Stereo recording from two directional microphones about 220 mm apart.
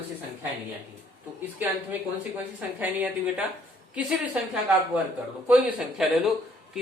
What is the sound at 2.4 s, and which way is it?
A woman's voice, 5° right (ahead or behind).